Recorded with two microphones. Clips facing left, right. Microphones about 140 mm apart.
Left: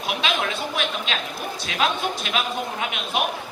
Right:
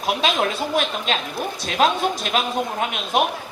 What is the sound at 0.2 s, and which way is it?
A man's voice, 40° right (ahead or behind).